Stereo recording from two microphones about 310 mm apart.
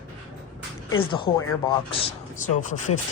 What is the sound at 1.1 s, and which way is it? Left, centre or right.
Speech, centre.